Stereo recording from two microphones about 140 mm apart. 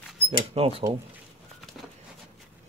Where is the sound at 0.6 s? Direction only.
40° right (ahead or behind).